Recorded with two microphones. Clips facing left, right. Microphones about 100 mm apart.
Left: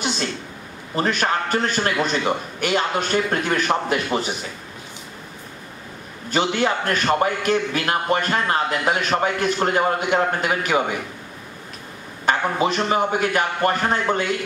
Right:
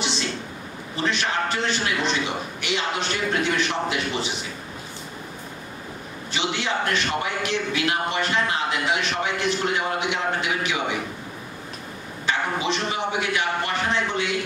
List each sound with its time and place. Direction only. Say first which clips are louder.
0.9 s a man's voice: left 4 dB; 45° left (ahead or behind)
6.3 s a man's voice: left 6 dB; 45° left (ahead or behind)
12.3 s a man's voice: left 5 dB; 45° left (ahead or behind)